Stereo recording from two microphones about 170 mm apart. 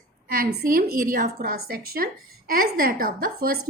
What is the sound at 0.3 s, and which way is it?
A woman's voice, 60° right (ahead or behind).